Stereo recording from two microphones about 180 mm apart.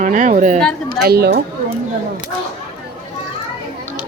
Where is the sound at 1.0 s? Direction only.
60° right (ahead or behind).